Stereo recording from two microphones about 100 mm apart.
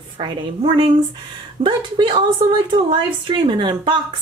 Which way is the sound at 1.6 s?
55° right (ahead or behind).